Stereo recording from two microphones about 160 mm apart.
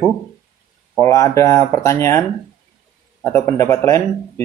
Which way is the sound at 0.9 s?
20° left (ahead or behind).